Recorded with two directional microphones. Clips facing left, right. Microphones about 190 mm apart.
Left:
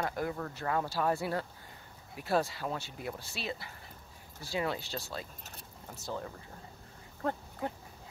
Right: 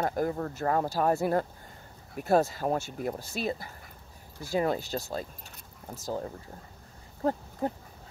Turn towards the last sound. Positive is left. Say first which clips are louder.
# right 6 dB
turn(degrees=-35)  # may be behind; listen again after turning